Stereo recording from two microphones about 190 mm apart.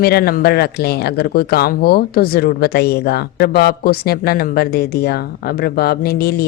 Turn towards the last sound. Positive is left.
turn(degrees=55)  # may be behind; listen again after turning